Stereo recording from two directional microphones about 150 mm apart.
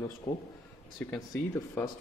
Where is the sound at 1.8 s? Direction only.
10° left (ahead or behind).